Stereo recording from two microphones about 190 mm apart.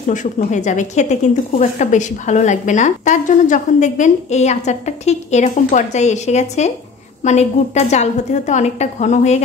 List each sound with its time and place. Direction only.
0.0 s speech: 40° left (ahead or behind)